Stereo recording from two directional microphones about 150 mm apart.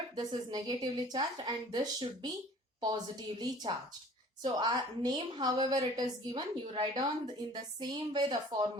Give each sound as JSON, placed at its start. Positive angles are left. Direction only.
{"t": 0.2, "sound": "a woman's voice", "side_deg": -25}